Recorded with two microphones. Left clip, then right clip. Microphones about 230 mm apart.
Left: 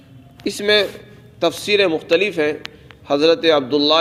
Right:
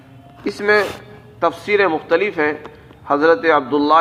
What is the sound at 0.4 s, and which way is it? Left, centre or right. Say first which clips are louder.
A man's voice: right 1 dB; left.